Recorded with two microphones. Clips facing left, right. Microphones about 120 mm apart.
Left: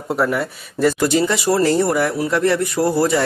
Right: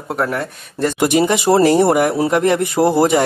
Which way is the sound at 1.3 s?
25° right (ahead or behind).